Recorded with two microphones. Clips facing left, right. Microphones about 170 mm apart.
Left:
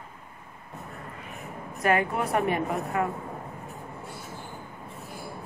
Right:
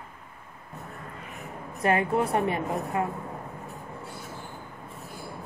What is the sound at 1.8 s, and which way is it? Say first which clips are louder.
A woman's voice: right 1 dB; 30° right (ahead or behind).